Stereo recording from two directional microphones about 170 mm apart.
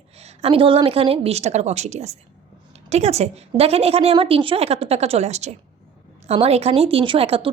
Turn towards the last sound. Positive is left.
turn(degrees=-35)  # may be behind; listen again after turning